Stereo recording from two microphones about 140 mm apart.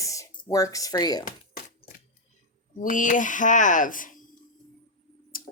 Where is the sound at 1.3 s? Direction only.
70° left (ahead or behind).